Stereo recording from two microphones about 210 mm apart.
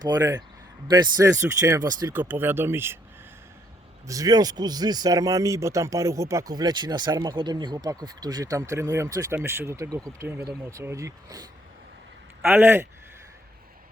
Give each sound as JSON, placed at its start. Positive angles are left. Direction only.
{"t": 0.0, "sound": "speech", "side_deg": -20}
{"t": 4.0, "sound": "speech", "side_deg": -15}